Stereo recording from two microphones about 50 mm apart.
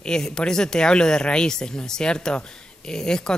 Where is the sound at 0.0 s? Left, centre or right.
Centre.